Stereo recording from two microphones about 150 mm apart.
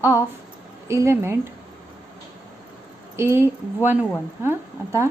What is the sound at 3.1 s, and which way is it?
A woman's voice, 15° right (ahead or behind).